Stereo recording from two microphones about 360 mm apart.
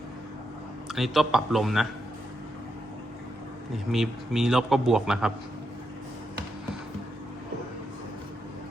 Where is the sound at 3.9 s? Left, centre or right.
Centre.